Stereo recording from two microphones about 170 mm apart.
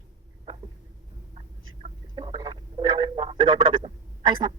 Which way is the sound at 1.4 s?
35° right (ahead or behind).